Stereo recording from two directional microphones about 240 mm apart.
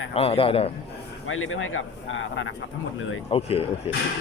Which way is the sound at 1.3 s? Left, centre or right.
Left.